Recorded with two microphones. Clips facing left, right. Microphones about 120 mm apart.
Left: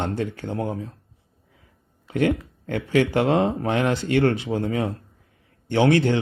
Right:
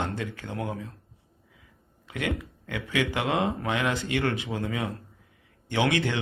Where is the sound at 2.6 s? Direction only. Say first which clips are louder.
Left 8 dB; 45° left (ahead or behind).